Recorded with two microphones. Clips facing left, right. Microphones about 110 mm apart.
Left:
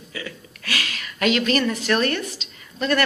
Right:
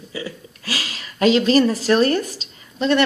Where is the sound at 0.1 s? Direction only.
30° right (ahead or behind).